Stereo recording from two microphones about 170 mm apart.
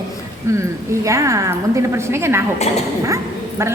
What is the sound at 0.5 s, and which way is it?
A woman's voice, 15° right (ahead or behind).